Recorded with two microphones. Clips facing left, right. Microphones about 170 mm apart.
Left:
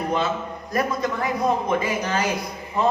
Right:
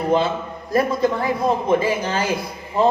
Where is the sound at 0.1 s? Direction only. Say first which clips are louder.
Right 5 dB; 30° right (ahead or behind).